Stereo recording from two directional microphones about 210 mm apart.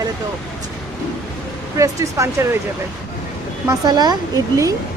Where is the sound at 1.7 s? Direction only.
15° right (ahead or behind).